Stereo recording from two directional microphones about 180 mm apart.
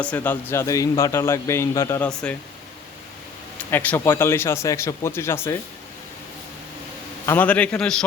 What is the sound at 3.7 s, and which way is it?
Speech, 10° left (ahead or behind).